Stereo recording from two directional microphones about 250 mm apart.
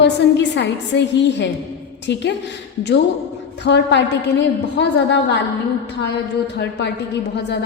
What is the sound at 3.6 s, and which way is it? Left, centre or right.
A woman's voice, left.